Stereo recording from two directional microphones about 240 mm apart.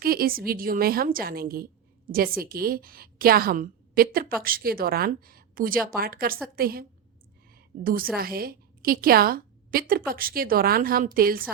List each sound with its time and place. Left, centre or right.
0.0 s a woman's voice: right
7.5 s a sound: right
8.1 s a woman's voice: right